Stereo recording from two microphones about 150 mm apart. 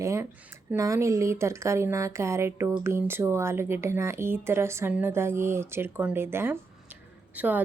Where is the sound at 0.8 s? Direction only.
20° right (ahead or behind).